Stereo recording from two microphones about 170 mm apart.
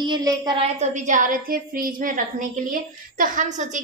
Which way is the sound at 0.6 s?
45° right (ahead or behind).